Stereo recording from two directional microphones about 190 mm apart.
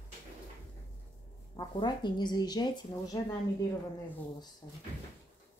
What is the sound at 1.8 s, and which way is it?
Speech, 20° left (ahead or behind).